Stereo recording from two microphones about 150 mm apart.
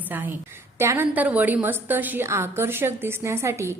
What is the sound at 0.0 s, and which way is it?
A woman's voice, 10° right (ahead or behind).